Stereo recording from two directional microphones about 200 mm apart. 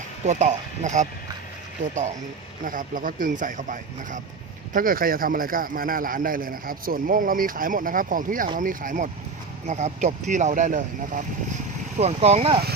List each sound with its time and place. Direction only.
0.3 s speech: 35° right (ahead or behind)